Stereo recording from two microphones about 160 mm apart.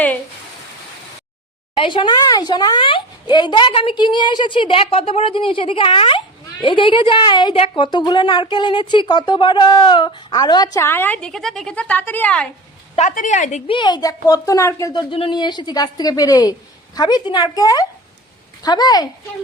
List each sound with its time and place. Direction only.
1.7 s speech: 30° left (ahead or behind); by 12.5 s 10° left (ahead or behind)
13.0 s a woman's voice: 50° left (ahead or behind)
13.7 s speech: 30° left (ahead or behind)
15.1 s speech: 30° left (ahead or behind)